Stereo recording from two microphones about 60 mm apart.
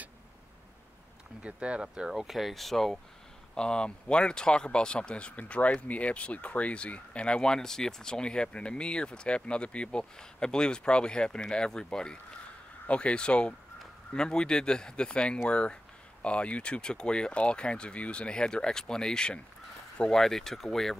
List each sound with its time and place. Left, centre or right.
1.4 s speech: centre
2.0 s speech: centre